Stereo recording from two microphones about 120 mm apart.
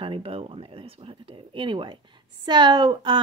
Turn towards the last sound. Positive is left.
turn(degrees=-40)  # may be behind; listen again after turning